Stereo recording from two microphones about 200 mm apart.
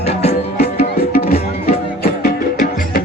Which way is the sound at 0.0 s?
30° left (ahead or behind).